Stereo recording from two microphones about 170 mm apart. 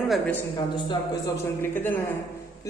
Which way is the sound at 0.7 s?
25° left (ahead or behind).